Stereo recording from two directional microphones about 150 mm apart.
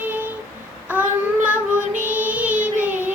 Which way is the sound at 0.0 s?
10° right (ahead or behind).